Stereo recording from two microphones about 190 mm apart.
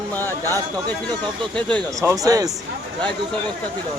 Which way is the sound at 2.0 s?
15° right (ahead or behind).